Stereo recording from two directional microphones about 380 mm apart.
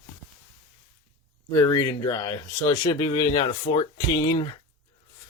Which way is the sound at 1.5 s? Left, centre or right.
Centre.